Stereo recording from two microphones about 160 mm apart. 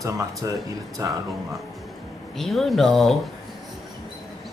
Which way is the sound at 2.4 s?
Centre (ahead or behind).